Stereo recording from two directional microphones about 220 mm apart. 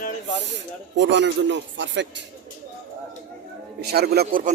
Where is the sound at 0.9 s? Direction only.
55° right (ahead or behind).